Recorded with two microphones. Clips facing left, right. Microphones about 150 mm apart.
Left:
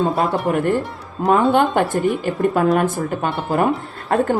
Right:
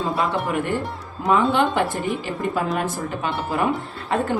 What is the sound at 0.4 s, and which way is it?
A woman's voice, 45° left (ahead or behind).